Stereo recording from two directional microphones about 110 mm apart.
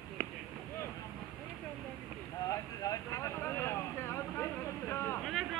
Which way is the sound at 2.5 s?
30° left (ahead or behind).